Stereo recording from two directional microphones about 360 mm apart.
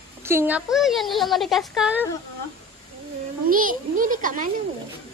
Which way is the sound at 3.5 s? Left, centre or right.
Right.